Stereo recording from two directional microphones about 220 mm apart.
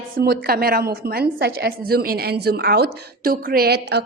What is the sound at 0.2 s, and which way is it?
A woman's voice, 45° right (ahead or behind).